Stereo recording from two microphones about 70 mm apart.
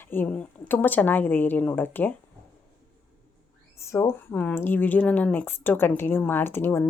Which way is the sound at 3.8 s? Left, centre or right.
Left.